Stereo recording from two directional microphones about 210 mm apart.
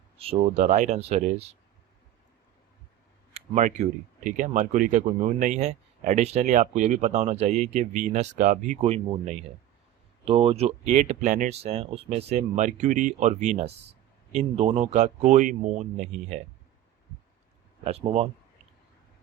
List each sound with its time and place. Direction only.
0.2 s speech: 30° right (ahead or behind)
3.3 s speech: 35° right (ahead or behind)
17.8 s speech: 30° right (ahead or behind)